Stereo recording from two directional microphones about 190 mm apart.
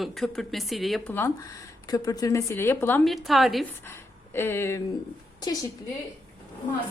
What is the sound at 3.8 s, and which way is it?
A woman's voice, 10° left (ahead or behind).